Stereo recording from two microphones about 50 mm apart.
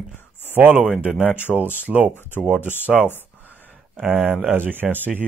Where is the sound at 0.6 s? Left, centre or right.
Right.